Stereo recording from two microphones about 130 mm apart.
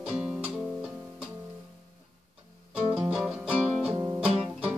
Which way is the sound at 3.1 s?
5° right (ahead or behind).